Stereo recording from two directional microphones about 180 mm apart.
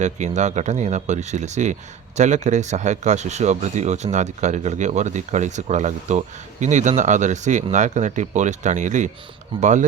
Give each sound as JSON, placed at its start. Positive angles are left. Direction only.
{"t": 0.0, "sound": "speech", "side_deg": -40}